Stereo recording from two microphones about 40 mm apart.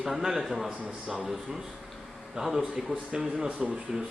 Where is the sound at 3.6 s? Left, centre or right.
Centre.